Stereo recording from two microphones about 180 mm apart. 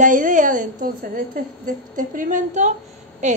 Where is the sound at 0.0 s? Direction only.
45° right (ahead or behind).